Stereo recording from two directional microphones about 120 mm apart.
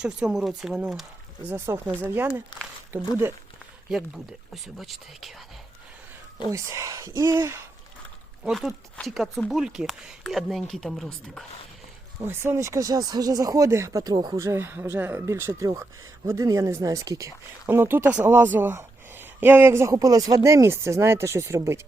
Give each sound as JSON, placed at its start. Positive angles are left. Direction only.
{"t": 0.0, "sound": "speech", "side_deg": -5}
{"t": 1.5, "sound": "speech", "side_deg": -20}
{"t": 3.8, "sound": "speech", "side_deg": -5}
{"t": 6.5, "sound": "speech", "side_deg": -25}
{"t": 8.4, "sound": "speech", "side_deg": 0}
{"t": 12.2, "sound": "speech", "side_deg": -20}
{"t": 14.3, "sound": "speech", "side_deg": -20}